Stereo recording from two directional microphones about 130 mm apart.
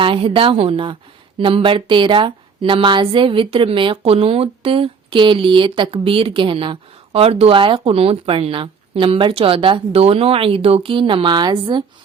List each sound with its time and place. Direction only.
0.0 s speech: 45° right (ahead or behind)